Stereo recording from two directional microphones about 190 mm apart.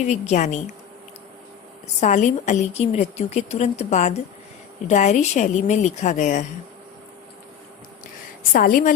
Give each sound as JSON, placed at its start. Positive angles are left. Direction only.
{"t": 0.0, "sound": "a woman's voice", "side_deg": 35}
{"t": 2.0, "sound": "a woman's voice", "side_deg": 40}
{"t": 8.5, "sound": "a woman's voice", "side_deg": 45}